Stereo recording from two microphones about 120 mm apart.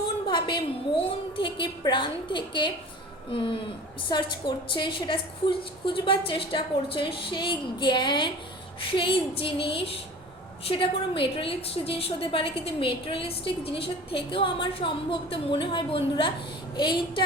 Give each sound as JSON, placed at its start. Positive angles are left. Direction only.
{"t": 0.3, "sound": "a woman's voice", "side_deg": 45}